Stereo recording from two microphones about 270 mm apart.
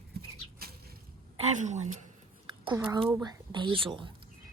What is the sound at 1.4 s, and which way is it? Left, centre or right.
Speech, right.